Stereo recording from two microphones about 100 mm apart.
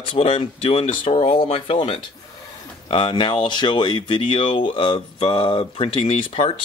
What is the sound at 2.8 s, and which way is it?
Speech, 55° left (ahead or behind).